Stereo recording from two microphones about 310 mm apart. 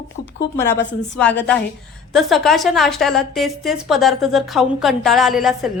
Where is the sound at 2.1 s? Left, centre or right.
Centre.